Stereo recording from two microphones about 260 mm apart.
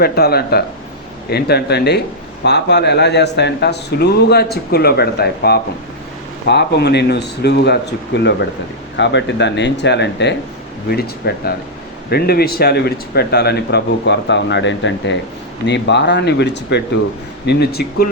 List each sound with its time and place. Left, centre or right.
0.0 s speech: left